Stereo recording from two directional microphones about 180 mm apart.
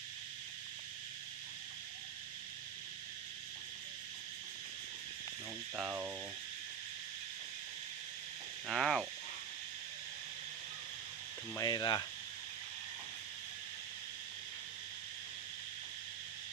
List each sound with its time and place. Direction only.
5.7 s speech: 5° right (ahead or behind)
8.6 s speech: centre (ahead or behind)
11.5 s speech: 20° left (ahead or behind)